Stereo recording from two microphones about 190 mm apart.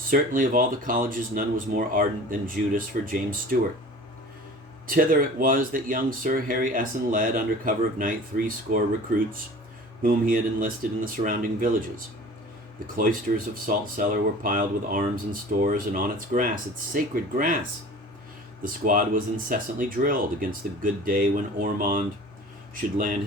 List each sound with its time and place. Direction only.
0.1 s speech: 45° right (ahead or behind)
4.9 s speech: 50° right (ahead or behind)
13.0 s speech: 50° right (ahead or behind)
18.6 s speech: 45° right (ahead or behind)